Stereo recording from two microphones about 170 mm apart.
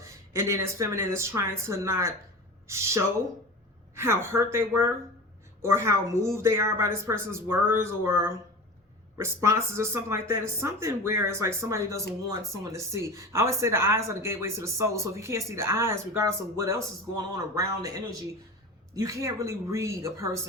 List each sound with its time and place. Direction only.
0.0 s speech: 15° right (ahead or behind)